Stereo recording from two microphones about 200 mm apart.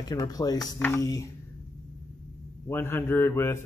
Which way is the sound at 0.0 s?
20° left (ahead or behind).